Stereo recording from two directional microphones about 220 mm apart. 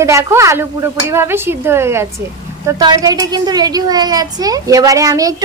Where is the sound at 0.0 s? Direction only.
15° right (ahead or behind).